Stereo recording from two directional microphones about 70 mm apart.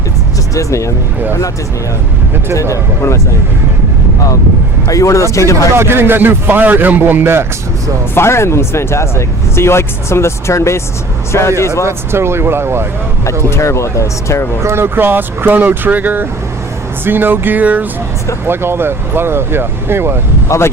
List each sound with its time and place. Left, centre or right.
0.5 s speech: left
2.6 s speech: left
4.9 s speech: left
5.7 s speech: right
8.1 s speech: left
11.9 s speech: right
13.5 s speech: left
14.6 s speech: right
18.4 s speech: right
20.5 s speech: left